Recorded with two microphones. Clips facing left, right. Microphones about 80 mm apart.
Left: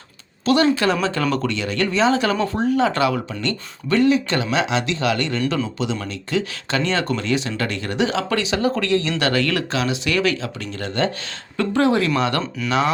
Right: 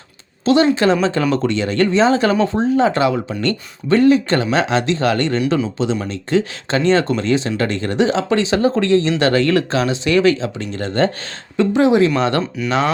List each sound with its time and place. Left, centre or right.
0.4 s speech: right
3.8 s speech: right
11.5 s speech: right
12.4 s speech: centre